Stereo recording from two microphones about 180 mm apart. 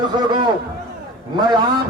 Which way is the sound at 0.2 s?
25° right (ahead or behind).